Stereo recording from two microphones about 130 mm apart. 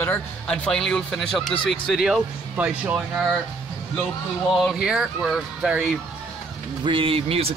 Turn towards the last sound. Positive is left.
turn(degrees=-50)  # may be behind; listen again after turning